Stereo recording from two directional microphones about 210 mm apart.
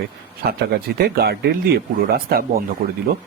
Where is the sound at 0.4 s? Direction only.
50° right (ahead or behind).